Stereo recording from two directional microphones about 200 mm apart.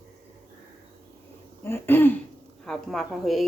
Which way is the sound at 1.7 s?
10° left (ahead or behind).